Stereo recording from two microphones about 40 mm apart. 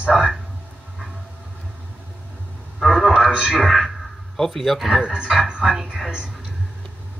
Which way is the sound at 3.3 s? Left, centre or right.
Right.